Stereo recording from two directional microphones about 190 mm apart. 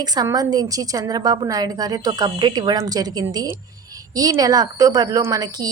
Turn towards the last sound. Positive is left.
turn(degrees=-20)  # may be behind; listen again after turning